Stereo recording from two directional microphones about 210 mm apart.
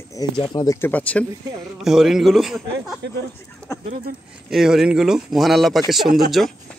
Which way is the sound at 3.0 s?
55° right (ahead or behind).